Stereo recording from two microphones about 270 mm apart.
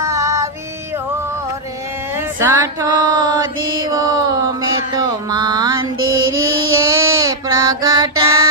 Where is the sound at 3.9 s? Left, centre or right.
Centre.